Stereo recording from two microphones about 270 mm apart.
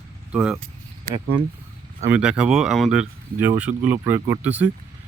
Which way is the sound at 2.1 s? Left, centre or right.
Centre.